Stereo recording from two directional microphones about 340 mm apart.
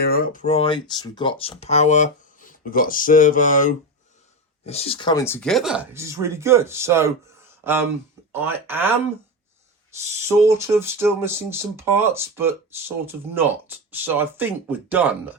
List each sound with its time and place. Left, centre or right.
0.0 s speech: left; by 15.4 s centre